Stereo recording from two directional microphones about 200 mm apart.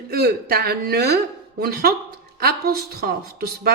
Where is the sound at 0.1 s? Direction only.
50° right (ahead or behind).